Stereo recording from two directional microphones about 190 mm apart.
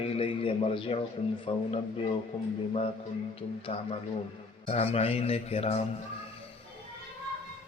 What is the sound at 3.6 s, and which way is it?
A man's voice, 30° left (ahead or behind).